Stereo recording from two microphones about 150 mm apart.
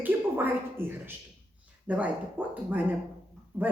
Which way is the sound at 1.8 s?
10° right (ahead or behind).